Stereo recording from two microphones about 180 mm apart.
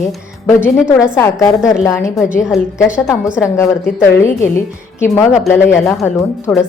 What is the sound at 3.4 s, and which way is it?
Speech, 15° left (ahead or behind).